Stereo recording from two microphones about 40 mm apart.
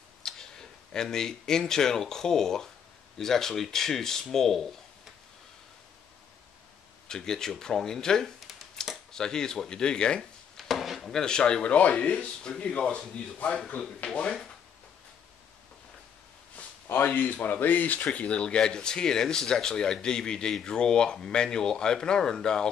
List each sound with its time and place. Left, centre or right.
0.2 s speech: centre
7.1 s speech: centre
8.8 s camera: centre
9.1 s speech: centre
10.6 s wood: centre
11.0 s speech: centre
11.7 s speech: left
16.9 s speech: left
18.0 s speech: left